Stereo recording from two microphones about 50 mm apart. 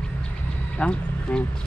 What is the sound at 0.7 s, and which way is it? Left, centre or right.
Speech, left.